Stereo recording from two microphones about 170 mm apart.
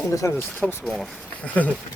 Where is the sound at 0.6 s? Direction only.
5° left (ahead or behind).